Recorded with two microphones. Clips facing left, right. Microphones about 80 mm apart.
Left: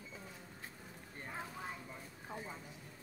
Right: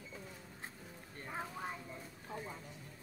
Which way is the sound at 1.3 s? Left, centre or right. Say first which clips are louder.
Right 3 dB; centre.